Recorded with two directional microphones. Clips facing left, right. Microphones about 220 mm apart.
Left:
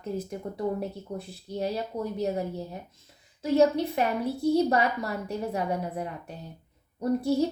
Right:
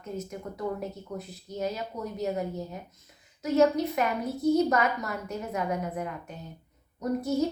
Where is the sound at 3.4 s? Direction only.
30° left (ahead or behind).